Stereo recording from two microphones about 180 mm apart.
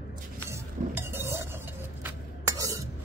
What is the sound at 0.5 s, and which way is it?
Stir, 15° right (ahead or behind).